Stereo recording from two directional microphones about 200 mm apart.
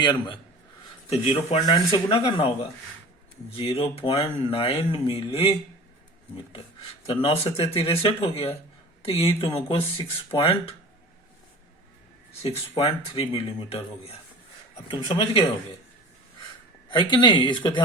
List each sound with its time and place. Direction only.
0.0 s speech: 20° left (ahead or behind)
3.5 s speech: 30° left (ahead or behind)
7.1 s speech: 30° left (ahead or behind)
12.4 s speech: 30° left (ahead or behind)
16.9 s speech: 25° left (ahead or behind)